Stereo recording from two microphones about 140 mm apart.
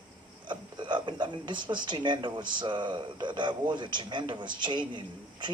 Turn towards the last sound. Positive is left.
turn(degrees=-35)  # may be behind; listen again after turning